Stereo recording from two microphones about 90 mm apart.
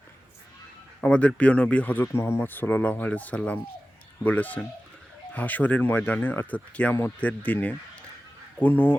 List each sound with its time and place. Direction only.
1.0 s speech: 15° left (ahead or behind)
2.1 s speech: 30° left (ahead or behind)